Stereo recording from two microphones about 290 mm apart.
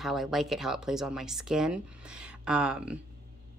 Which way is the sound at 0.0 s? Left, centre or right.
Centre.